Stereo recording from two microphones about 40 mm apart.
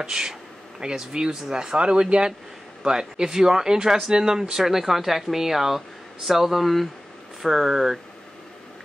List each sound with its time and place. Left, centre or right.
0.0 s speech: centre